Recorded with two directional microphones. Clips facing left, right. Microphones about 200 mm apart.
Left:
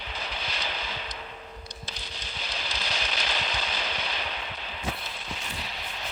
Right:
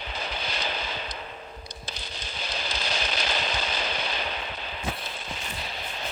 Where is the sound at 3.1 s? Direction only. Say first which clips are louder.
Right 3 dB; 45° right (ahead or behind).